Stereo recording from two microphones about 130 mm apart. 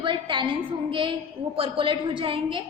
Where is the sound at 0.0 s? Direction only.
40° right (ahead or behind).